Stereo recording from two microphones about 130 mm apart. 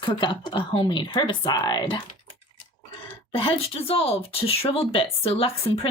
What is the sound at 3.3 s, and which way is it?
A woman's voice, 45° left (ahead or behind).